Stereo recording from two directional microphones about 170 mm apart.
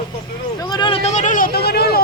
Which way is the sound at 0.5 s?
25° left (ahead or behind).